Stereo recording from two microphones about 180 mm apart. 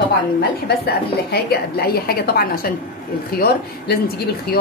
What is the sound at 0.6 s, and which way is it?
A woman's voice, 60° left (ahead or behind).